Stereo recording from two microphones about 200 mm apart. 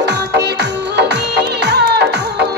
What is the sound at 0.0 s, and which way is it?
Music, 55° right (ahead or behind).